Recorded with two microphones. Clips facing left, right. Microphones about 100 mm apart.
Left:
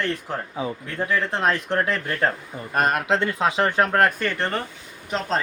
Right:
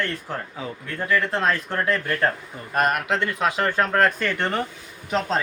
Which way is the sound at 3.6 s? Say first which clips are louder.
Left 1 dB; 15° left (ahead or behind).